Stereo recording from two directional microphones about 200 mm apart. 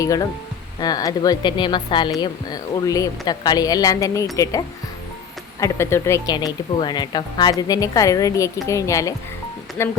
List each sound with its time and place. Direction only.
0.0 s a woman's voice: 15° left (ahead or behind)
5.5 s a woman's voice: 15° left (ahead or behind)